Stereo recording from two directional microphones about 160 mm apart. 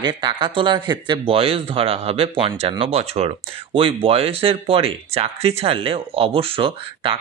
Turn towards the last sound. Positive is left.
turn(degrees=-35)  # may be behind; listen again after turning